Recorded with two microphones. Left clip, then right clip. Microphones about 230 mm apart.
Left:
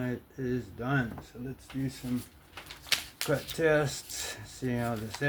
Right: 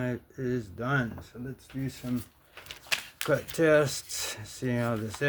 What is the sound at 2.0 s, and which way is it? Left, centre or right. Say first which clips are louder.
Speech: right 3 dB; right.